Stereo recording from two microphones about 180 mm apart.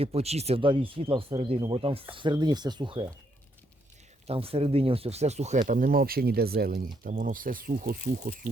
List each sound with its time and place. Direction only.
0.0 s speech: 35° right (ahead or behind)
4.3 s speech: 30° right (ahead or behind); by 8.4 s 55° right (ahead or behind)